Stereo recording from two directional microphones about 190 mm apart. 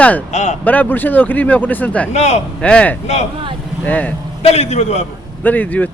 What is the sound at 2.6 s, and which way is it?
Speech, 5° left (ahead or behind).